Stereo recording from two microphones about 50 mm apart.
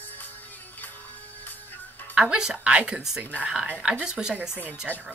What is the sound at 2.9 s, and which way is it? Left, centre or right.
Speech, centre.